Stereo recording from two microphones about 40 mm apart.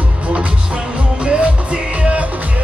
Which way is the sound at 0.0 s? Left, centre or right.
Right.